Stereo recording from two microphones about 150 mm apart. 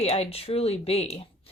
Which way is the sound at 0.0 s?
45° left (ahead or behind).